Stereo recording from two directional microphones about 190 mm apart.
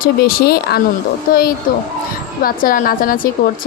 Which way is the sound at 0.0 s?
50° left (ahead or behind).